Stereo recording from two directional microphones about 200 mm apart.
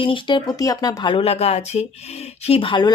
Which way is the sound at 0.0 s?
25° left (ahead or behind).